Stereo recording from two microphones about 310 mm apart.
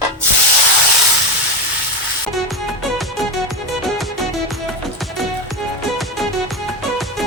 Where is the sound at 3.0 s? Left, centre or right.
Centre.